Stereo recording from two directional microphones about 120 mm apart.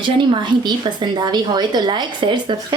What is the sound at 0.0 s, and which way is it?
Speech, 40° right (ahead or behind).